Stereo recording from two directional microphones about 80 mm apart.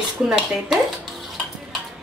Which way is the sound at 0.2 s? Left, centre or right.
Centre.